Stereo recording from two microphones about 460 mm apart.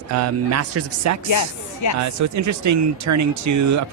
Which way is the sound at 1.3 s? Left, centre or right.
Left.